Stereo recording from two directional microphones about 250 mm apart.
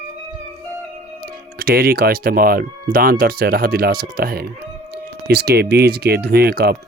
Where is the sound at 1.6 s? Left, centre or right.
Right.